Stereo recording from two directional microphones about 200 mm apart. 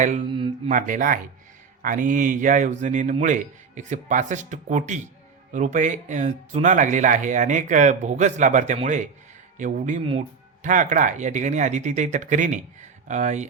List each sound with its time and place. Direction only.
0.0 s speech: 40° right (ahead or behind)
0.3 s a sound: 25° right (ahead or behind)
0.7 s speech: 40° right (ahead or behind)